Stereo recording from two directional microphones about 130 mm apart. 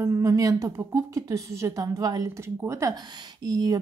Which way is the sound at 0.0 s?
25° right (ahead or behind).